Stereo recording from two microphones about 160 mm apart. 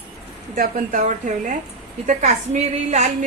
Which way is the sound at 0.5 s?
60° right (ahead or behind).